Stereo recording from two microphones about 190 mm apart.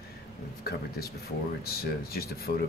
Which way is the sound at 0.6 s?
55° left (ahead or behind).